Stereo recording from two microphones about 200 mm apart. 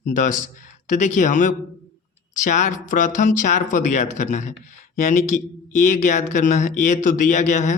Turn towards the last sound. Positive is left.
turn(degrees=35)  # may be behind; listen again after turning